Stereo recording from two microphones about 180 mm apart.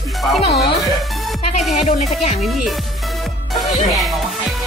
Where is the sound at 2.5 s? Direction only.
Centre (ahead or behind).